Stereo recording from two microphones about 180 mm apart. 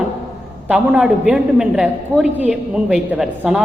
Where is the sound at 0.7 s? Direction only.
5° right (ahead or behind).